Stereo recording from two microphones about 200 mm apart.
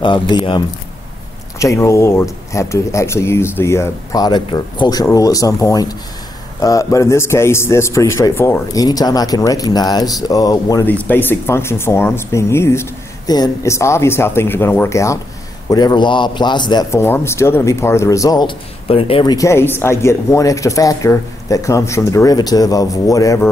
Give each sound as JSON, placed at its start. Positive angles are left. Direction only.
{"t": 0.0, "sound": "a man's voice", "side_deg": 25}